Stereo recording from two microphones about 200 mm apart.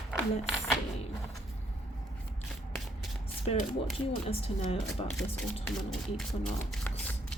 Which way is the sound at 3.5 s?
30° left (ahead or behind).